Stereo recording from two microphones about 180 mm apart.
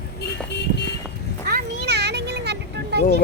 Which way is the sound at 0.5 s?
70° left (ahead or behind).